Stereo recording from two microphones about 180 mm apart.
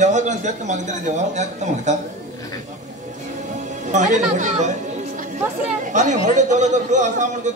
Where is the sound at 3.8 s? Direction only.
40° right (ahead or behind).